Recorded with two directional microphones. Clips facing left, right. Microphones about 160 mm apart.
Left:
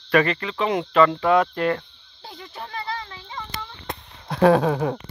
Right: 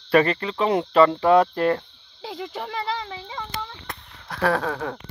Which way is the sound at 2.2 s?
90° right.